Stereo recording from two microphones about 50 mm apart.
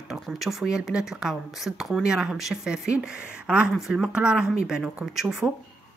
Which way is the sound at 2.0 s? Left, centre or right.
Centre.